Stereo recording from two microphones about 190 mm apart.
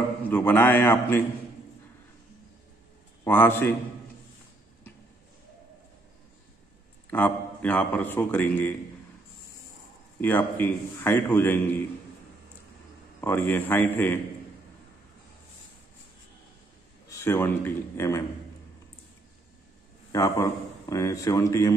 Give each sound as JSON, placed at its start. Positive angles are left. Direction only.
{"t": 0.3, "sound": "a man's voice", "side_deg": 10}
{"t": 3.3, "sound": "a man's voice", "side_deg": 10}
{"t": 7.1, "sound": "a man's voice", "side_deg": 10}
{"t": 10.2, "sound": "a man's voice", "side_deg": 10}
{"t": 13.2, "sound": "a man's voice", "side_deg": 10}
{"t": 17.1, "sound": "a man's voice", "side_deg": 15}
{"t": 20.1, "sound": "a man's voice", "side_deg": 15}